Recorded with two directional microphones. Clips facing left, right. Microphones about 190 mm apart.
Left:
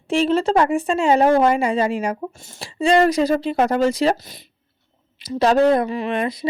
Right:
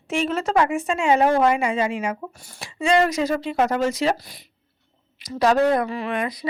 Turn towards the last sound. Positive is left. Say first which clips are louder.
# left 3 dB
turn(degrees=25)  # may be behind; listen again after turning